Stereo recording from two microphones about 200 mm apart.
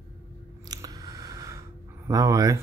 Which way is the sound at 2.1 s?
15° right (ahead or behind).